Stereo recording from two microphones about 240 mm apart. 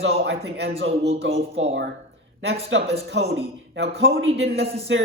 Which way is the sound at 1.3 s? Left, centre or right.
Right.